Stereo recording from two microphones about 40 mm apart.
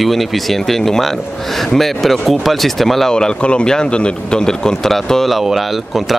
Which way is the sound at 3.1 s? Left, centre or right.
Left.